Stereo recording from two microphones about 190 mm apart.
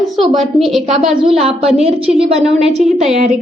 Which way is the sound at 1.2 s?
30° right (ahead or behind).